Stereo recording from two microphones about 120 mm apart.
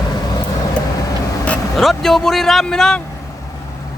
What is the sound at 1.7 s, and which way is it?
Speech, centre (ahead or behind).